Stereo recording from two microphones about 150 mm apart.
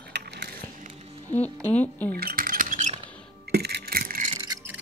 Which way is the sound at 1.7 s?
10° left (ahead or behind).